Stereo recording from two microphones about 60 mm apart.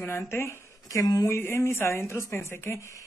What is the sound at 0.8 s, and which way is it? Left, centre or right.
Speech, left.